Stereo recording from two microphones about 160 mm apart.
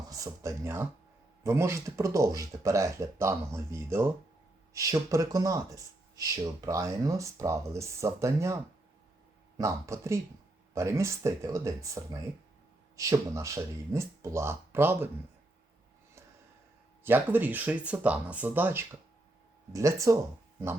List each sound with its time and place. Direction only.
0.1 s speech: 20° right (ahead or behind)
9.6 s speech: 20° right (ahead or behind)
17.0 s speech: 15° right (ahead or behind)